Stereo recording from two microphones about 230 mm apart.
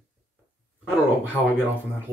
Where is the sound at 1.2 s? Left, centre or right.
Centre.